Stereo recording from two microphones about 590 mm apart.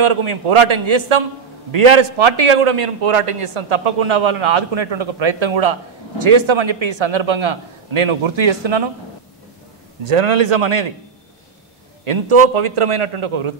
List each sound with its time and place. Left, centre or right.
0.0 s a man's voice: right
10.0 s a man's voice: right
12.1 s a man's voice: right